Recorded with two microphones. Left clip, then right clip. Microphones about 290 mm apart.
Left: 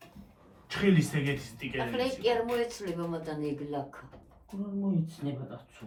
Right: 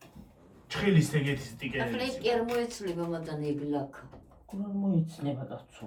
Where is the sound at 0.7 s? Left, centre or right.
Centre.